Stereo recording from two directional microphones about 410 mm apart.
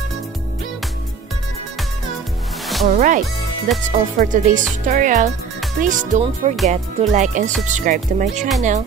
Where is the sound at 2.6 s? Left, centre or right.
Centre.